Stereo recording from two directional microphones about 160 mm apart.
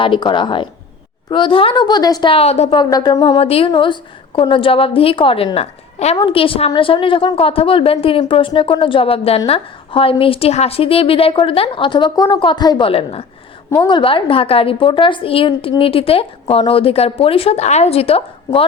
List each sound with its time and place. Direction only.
0.0 s a woman's voice: 30° left (ahead or behind)
2.7 s a woman's voice: 25° left (ahead or behind)
13.7 s a woman's voice: 20° left (ahead or behind)
13.9 s a woman's voice: 30° left (ahead or behind)